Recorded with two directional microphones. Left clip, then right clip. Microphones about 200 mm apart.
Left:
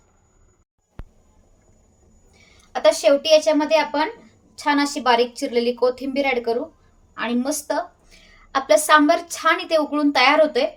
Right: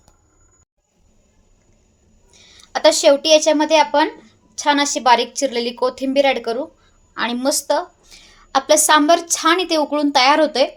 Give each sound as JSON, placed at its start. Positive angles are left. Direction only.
{"t": 2.6, "sound": "a woman's voice", "side_deg": -30}